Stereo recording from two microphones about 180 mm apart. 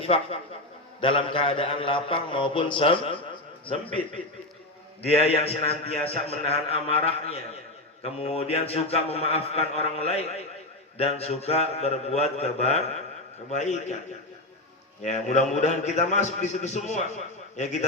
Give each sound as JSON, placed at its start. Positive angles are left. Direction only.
{"t": 0.0, "sound": "a man's voice", "side_deg": 35}
{"t": 4.0, "sound": "speech", "side_deg": 10}
{"t": 5.0, "sound": "a man's voice", "side_deg": 35}
{"t": 15.0, "sound": "a man's voice", "side_deg": 40}